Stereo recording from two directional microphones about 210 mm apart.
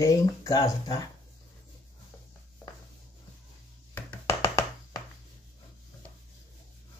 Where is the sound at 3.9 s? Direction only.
15° left (ahead or behind).